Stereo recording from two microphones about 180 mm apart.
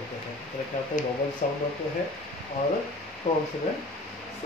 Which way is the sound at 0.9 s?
45° left (ahead or behind).